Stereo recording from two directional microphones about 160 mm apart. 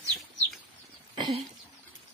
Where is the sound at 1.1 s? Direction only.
30° right (ahead or behind).